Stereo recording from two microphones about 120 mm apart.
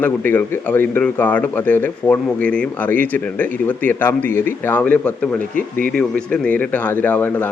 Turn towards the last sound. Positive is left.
turn(degrees=15)  # may be behind; listen again after turning